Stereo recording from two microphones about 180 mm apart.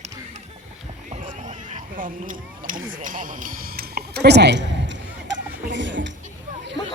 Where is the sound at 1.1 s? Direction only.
45° right (ahead or behind); by 6.1 s 90° right.